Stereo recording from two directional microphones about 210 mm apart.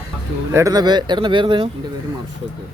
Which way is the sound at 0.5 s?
15° right (ahead or behind).